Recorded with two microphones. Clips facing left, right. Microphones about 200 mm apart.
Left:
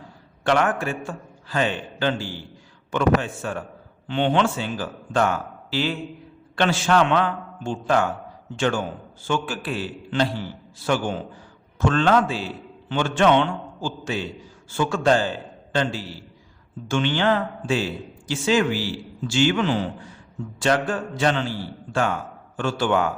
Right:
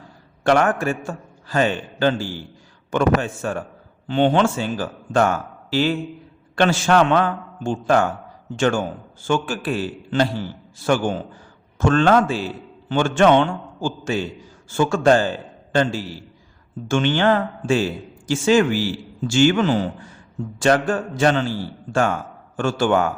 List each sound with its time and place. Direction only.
0.4 s a man's voice: 45° right (ahead or behind)
22.5 s a man's voice: 45° right (ahead or behind)